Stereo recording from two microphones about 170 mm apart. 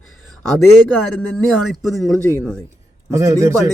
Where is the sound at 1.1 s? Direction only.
Centre (ahead or behind).